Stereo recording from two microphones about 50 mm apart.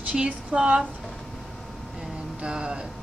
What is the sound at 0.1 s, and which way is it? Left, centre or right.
Speech, centre.